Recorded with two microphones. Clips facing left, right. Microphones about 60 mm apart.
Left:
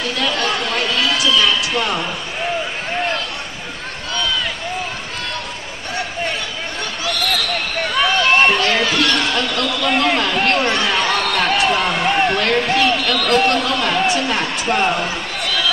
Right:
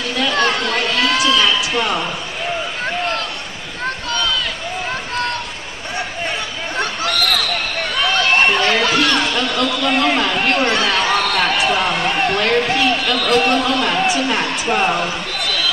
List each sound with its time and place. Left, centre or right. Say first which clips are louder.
0.1 s chatter: right 4 dB; centre
0.4 s chatter: right 3 dB; right
0.7 s chatter: right 1 dB; centre
1.0 s a sound: right 2 dB; right
1.4 s a man's voice: right 1 dB; centre
6.8 s a sound: right 4 dB; right
7.9 s speech: left 1 dB; centre